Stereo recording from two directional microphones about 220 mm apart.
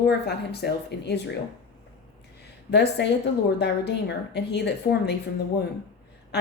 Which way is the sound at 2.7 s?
50° left (ahead or behind).